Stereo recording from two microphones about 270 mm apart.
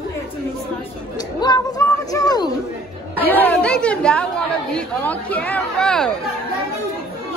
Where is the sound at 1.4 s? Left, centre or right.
Centre.